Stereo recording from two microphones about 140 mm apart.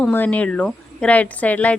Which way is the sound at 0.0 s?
10° left (ahead or behind).